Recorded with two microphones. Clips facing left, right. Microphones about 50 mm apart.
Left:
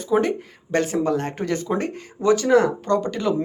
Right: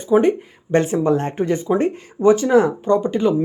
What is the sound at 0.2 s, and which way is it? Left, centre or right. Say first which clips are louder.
Speech: right 5 dB; right.